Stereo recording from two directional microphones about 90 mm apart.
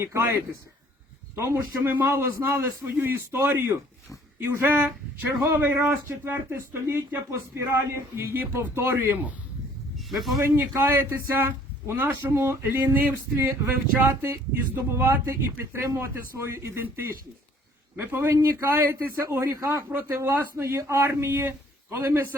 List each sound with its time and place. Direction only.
0.0 s speech: 30° right (ahead or behind)
1.4 s speech: 30° right (ahead or behind)
4.7 s speech: 20° right (ahead or behind)
10.1 s speech: centre (ahead or behind)
10.4 s speech: 25° right (ahead or behind)
14.8 s speech: 25° right (ahead or behind)